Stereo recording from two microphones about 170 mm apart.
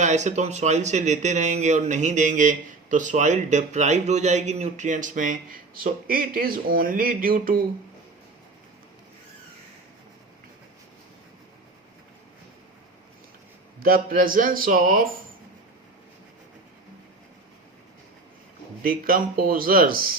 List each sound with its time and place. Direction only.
0.0 s speech: 45° right (ahead or behind)
13.7 s speech: 60° right (ahead or behind)
18.8 s speech: 55° right (ahead or behind)